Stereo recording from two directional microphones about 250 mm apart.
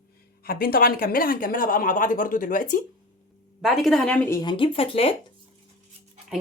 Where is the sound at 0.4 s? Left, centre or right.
Left.